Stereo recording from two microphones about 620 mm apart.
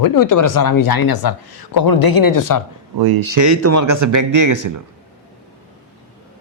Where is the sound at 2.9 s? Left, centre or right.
Right.